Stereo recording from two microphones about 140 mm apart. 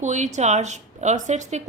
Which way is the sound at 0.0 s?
55° right (ahead or behind).